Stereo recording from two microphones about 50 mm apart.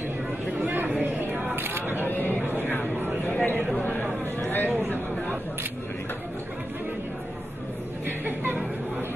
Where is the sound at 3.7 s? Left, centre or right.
Left.